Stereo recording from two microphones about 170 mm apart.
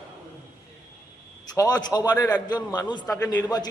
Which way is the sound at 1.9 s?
20° left (ahead or behind).